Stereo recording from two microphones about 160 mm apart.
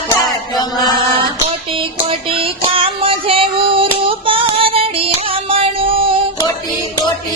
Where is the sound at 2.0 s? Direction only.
35° right (ahead or behind).